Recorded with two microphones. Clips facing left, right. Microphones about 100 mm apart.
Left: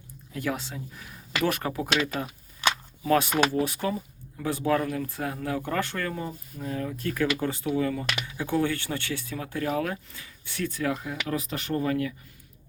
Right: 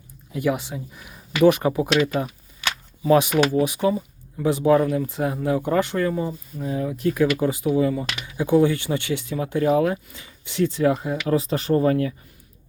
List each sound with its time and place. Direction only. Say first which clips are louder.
0.3 s speech: right 7 dB; 10° right (ahead or behind)
3.3 s speech: right 5 dB; 10° right (ahead or behind); by 12.1 s 35° right (ahead or behind)